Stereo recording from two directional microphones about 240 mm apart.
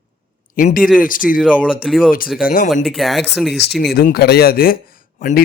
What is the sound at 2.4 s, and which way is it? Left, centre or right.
Speech, left.